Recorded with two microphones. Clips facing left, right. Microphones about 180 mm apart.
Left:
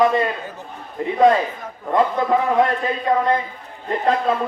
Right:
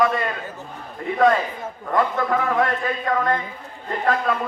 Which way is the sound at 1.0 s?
20° left (ahead or behind).